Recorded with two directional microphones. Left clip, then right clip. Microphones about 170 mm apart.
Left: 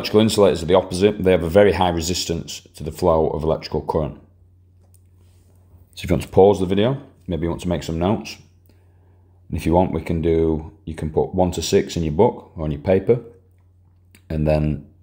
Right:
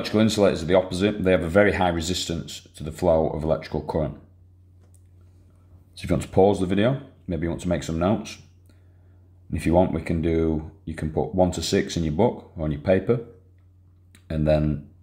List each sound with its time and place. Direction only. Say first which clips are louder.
0.1 s speech: left 5 dB; 20° left (ahead or behind)
5.9 s speech: left 5 dB; 30° left (ahead or behind)
9.5 s speech: left 2 dB; 25° left (ahead or behind)